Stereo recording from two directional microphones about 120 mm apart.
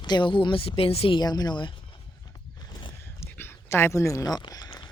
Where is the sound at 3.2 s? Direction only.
20° left (ahead or behind).